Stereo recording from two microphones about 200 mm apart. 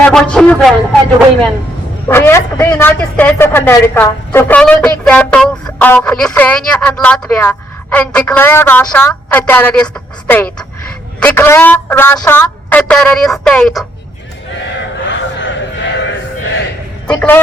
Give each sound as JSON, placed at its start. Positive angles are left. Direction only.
{"t": 0.0, "sound": "a man's voice", "side_deg": 5}
{"t": 2.0, "sound": "a man's voice", "side_deg": 10}
{"t": 15.0, "sound": "crowd", "side_deg": 65}
{"t": 17.1, "sound": "a man's voice", "side_deg": 10}